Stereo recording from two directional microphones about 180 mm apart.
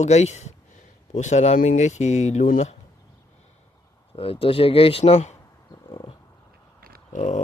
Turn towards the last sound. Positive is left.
turn(degrees=45)  # may be behind; listen again after turning